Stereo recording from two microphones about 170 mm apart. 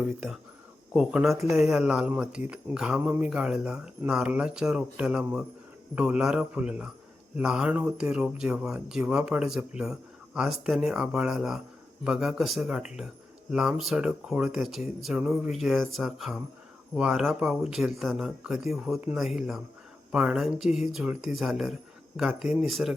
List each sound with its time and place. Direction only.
0.9 s speech: 5° right (ahead or behind)
1.4 s a man's voice: 15° right (ahead or behind)
1.6 s a man's voice: 5° right (ahead or behind)